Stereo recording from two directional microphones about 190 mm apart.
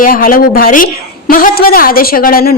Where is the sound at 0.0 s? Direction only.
50° left (ahead or behind).